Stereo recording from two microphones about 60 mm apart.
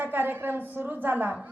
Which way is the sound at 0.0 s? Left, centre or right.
Right.